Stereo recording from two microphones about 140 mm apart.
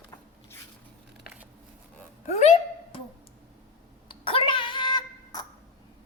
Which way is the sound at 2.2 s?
50° left (ahead or behind).